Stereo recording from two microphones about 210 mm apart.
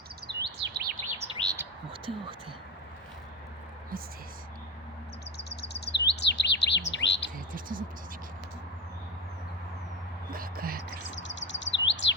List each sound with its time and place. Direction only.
0.3 s chirp: 50° right (ahead or behind)
1.2 s chirp: 20° right (ahead or behind)
5.4 s chirp: 50° left (ahead or behind)
7.3 s bird: 40° right (ahead or behind)
10.3 s music: 45° right (ahead or behind)
10.9 s chirp: 60° left (ahead or behind)